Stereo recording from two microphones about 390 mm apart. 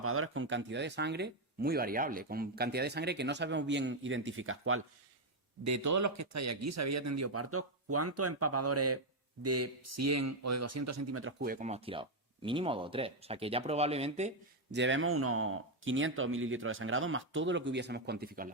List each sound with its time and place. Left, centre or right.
0.0 s speech: right
5.6 s speech: right